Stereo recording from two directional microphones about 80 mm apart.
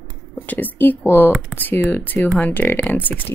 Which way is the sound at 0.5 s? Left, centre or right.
Left.